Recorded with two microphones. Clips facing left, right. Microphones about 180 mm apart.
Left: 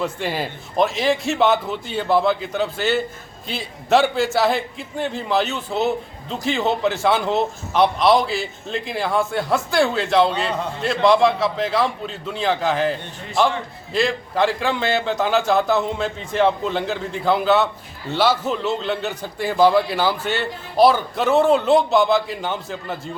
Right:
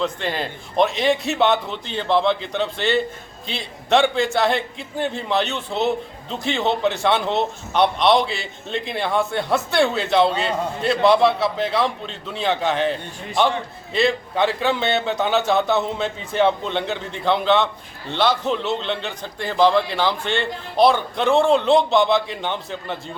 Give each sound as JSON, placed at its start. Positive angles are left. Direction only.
{"t": 0.0, "sound": "a man's voice", "side_deg": 10}